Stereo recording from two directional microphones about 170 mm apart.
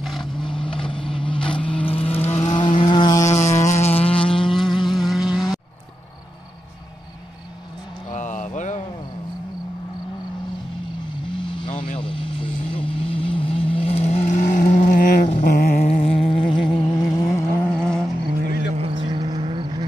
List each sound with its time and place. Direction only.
0.0 s a sound: centre (ahead or behind)
0.3 s vehicle: 30° left (ahead or behind)
3.3 s a sound: 45° left (ahead or behind)
4.6 s a sound: centre (ahead or behind)
8.1 s mantra: 45° left (ahead or behind)
11.2 s vehicle: 30° left (ahead or behind); by 15.8 s 55° left (ahead or behind)
15.8 s music: 35° left (ahead or behind)
17.3 s vehicle: 5° left (ahead or behind)
18.8 s vehicle: 30° right (ahead or behind)